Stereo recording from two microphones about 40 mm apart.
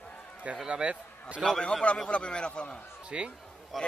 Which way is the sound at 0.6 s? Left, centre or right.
Right.